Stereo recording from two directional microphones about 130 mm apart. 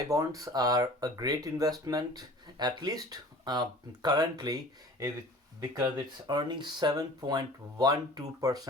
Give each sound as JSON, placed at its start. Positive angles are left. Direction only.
{"t": 0.1, "sound": "speech", "side_deg": -25}